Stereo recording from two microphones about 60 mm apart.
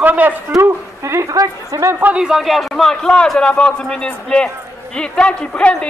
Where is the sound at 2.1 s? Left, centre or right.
Centre.